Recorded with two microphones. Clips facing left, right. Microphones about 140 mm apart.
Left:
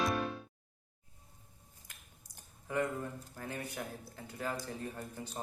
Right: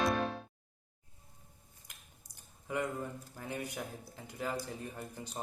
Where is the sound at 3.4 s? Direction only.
15° right (ahead or behind).